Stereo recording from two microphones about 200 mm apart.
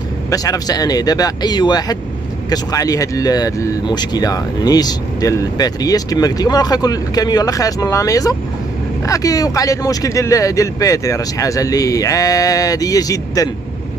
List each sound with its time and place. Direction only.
0.3 s speech: 15° left (ahead or behind)